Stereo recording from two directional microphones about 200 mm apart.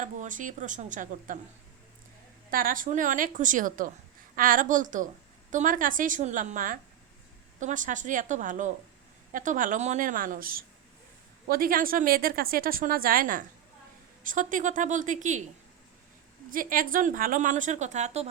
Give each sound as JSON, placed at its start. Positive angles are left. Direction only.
{"t": 0.0, "sound": "speech", "side_deg": -40}
{"t": 2.5, "sound": "a woman's voice", "side_deg": -45}
{"t": 16.5, "sound": "speech", "side_deg": -45}